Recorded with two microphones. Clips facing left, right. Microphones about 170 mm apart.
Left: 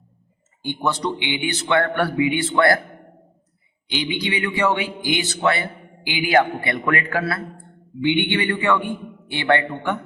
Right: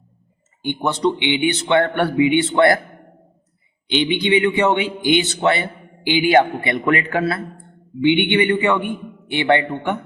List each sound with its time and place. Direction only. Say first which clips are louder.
0.6 s speech: right 4 dB; 20° right (ahead or behind)
3.8 s speech: right 7 dB; 25° right (ahead or behind)